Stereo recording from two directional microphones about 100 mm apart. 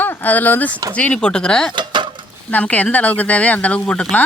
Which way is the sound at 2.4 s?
15° left (ahead or behind).